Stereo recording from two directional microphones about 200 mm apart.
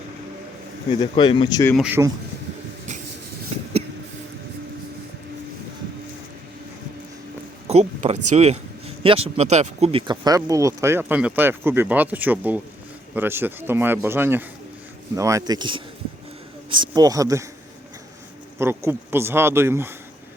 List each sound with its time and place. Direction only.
0.9 s speech: 25° left (ahead or behind)
1.7 s speech: 5° right (ahead or behind)
7.7 s speech: 30° right (ahead or behind); by 17.4 s 15° right (ahead or behind)
18.6 s speech: 10° right (ahead or behind)